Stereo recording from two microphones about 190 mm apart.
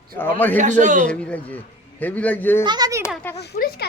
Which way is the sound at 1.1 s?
5° left (ahead or behind).